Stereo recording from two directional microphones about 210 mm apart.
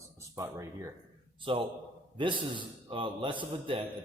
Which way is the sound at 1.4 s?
25° right (ahead or behind).